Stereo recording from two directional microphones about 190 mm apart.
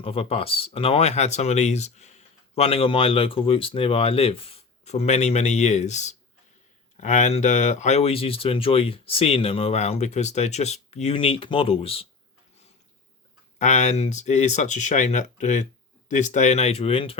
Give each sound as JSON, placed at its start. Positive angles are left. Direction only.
{"t": 0.0, "sound": "speech", "side_deg": 30}
{"t": 13.6, "sound": "speech", "side_deg": 40}